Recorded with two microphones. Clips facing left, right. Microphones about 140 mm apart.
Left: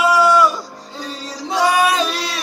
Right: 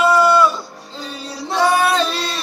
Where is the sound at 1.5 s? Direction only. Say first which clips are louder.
Even; 10° left (ahead or behind).